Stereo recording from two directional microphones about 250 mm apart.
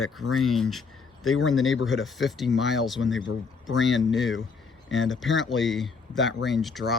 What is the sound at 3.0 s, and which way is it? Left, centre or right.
Speech, left.